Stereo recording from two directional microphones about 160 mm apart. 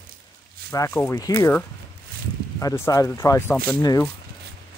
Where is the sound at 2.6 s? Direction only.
20° left (ahead or behind).